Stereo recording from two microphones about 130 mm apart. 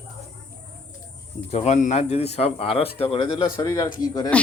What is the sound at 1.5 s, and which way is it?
Speech, 60° left (ahead or behind).